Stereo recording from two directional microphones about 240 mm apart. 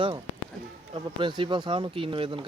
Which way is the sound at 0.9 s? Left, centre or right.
Centre.